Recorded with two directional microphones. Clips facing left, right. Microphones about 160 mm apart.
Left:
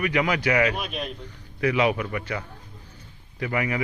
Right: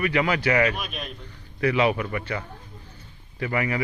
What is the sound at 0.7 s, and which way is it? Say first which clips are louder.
Speech: left 3 dB; 30° left (ahead or behind).